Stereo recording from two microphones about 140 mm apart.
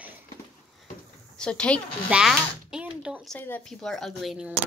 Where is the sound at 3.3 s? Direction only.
15° left (ahead or behind); by 4.5 s 5° right (ahead or behind).